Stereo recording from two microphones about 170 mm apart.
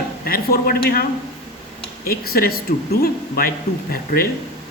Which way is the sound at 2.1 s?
60° left (ahead or behind).